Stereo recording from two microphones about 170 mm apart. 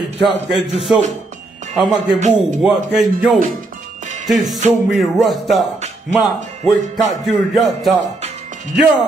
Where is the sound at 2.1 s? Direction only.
45° right (ahead or behind).